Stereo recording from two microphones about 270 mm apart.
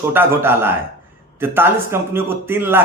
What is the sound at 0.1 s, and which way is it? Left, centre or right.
A man's voice, centre.